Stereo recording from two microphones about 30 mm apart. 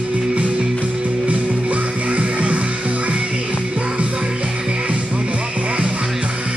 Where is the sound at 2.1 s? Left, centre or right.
Right.